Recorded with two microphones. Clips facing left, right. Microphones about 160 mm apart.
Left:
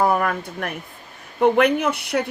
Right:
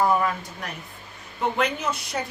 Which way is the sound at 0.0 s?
60° left (ahead or behind).